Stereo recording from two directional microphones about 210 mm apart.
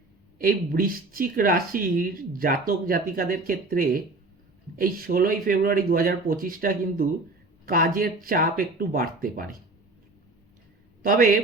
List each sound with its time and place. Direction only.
0.3 s speech: 45° right (ahead or behind)
11.0 s a man's voice: 40° right (ahead or behind)